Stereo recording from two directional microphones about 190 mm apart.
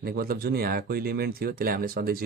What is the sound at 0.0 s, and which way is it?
Speech, 55° right (ahead or behind).